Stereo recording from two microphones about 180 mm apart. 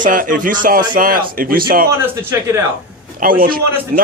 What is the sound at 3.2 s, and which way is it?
Speech, 50° right (ahead or behind).